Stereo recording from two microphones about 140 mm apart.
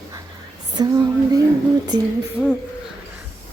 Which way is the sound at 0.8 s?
30° right (ahead or behind).